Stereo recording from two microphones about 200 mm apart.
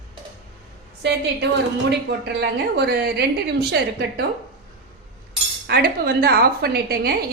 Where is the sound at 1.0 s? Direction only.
60° right (ahead or behind).